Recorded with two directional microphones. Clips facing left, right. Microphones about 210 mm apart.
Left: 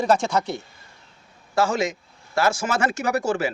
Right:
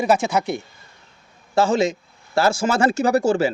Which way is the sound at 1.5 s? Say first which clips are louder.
Right 4 dB; 25° right (ahead or behind).